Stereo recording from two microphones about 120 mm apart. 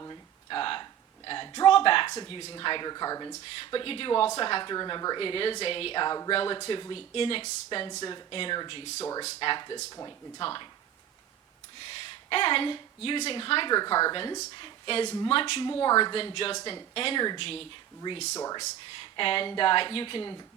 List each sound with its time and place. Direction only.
0.0 s a sound: 35° left (ahead or behind)
0.6 s a sound: 45° left (ahead or behind)
2.2 s speech: 50° left (ahead or behind)
5.2 s speech: 50° left (ahead or behind)
7.9 s speech: 35° left (ahead or behind)
8.3 s speech: 50° left (ahead or behind)
9.2 s speech: 45° left (ahead or behind)
12.3 s speech: 50° left (ahead or behind)
13.7 s speech: 35° left (ahead or behind); by 15.6 s 50° left (ahead or behind)
15.6 s speech: 40° left (ahead or behind)
16.1 s speech: 50° left (ahead or behind)
18.0 s speech: 35° left (ahead or behind)
18.9 s speech: 50° left (ahead or behind)